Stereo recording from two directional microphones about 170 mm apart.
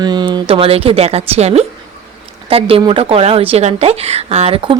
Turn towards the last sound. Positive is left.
turn(degrees=-30)  # may be behind; listen again after turning